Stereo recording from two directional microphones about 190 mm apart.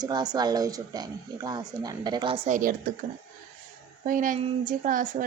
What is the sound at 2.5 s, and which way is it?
Speech, 45° right (ahead or behind).